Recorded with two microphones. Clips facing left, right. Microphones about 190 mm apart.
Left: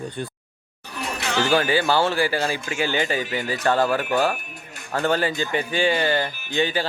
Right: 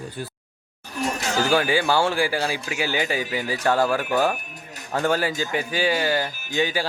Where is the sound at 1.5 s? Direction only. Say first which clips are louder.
Left 1 dB; 10° right (ahead or behind).